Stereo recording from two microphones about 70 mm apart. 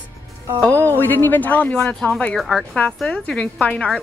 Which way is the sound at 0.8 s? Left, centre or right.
Left.